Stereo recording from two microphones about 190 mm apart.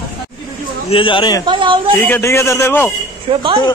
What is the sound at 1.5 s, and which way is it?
Speech, 25° right (ahead or behind).